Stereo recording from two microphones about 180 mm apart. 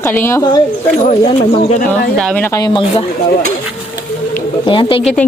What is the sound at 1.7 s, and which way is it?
Speech, 50° left (ahead or behind).